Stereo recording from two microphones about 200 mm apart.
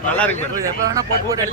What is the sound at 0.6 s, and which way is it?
Speech, 15° right (ahead or behind).